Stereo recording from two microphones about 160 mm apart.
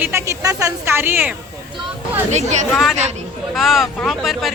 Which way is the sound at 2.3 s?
45° right (ahead or behind).